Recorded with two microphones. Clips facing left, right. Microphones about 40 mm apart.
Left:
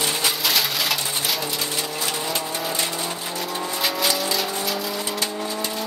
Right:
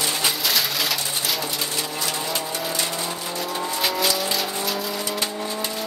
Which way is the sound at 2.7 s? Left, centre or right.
Left.